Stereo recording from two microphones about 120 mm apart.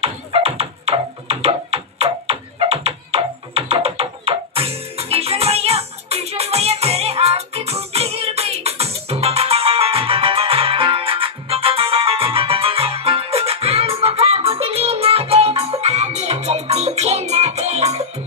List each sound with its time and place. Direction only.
0.0 s music: 55° right (ahead or behind)